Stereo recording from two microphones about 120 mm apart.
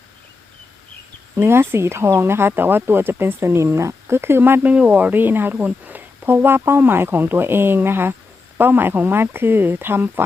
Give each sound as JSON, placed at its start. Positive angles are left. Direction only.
{"t": 1.4, "sound": "speech", "side_deg": -20}